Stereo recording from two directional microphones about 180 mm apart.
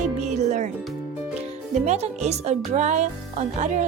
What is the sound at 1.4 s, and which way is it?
Speech, 35° right (ahead or behind).